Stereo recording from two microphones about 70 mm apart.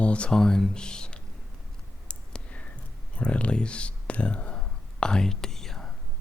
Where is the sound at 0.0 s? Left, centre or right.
Centre.